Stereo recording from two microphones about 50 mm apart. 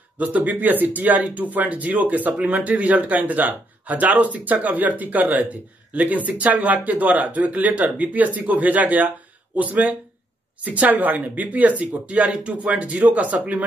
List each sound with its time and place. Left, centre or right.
0.2 s speech: right